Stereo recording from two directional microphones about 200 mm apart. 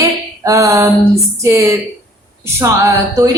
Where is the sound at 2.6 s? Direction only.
15° right (ahead or behind).